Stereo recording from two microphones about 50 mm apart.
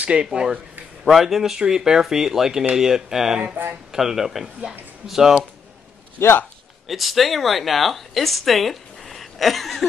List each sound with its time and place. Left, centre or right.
0.0 s speech: right
1.0 s speech: centre
6.1 s a man's voice: left
6.9 s a woman's voice: centre